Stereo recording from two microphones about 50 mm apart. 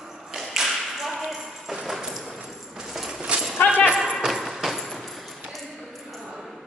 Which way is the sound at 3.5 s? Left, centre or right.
Left.